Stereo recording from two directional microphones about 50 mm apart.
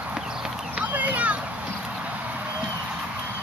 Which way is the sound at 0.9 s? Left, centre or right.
Right.